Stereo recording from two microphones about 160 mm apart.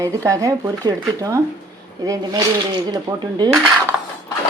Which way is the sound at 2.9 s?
25° right (ahead or behind).